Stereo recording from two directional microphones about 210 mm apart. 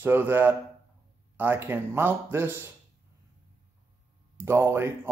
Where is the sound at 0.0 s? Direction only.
10° right (ahead or behind).